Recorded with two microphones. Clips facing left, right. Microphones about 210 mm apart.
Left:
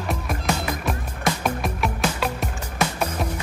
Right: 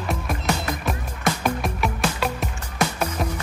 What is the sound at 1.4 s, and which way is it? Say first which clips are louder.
Music: right 1 dB; centre (ahead or behind).